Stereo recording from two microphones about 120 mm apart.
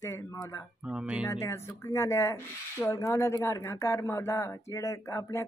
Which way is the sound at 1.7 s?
25° left (ahead or behind).